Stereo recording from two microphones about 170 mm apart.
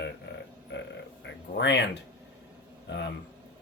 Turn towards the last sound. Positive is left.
turn(degrees=90)